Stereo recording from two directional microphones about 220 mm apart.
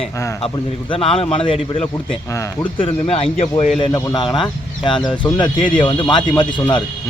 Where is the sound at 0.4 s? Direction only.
25° left (ahead or behind).